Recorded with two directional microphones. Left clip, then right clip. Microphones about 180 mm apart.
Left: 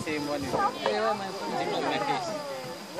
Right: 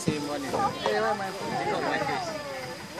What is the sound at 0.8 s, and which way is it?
Speech, 35° right (ahead or behind).